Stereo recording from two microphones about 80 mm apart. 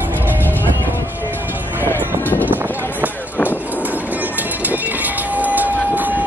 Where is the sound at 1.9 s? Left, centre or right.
Left.